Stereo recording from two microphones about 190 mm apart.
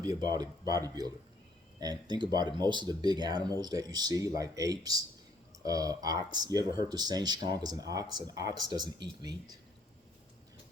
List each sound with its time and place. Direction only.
0.0 s speech: 20° right (ahead or behind)